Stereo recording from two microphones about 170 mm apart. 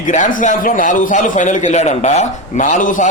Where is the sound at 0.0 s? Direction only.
50° left (ahead or behind).